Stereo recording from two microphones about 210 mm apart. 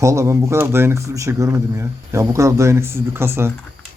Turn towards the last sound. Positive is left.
turn(degrees=-10)  # may be behind; listen again after turning